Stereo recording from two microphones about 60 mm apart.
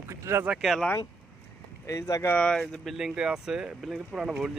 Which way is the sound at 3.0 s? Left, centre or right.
Centre.